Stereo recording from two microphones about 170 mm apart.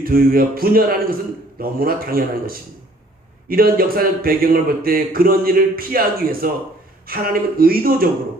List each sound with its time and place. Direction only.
0.0 s speech: 60° right (ahead or behind)